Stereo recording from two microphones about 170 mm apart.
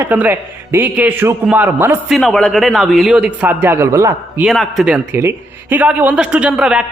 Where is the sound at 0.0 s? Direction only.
10° right (ahead or behind).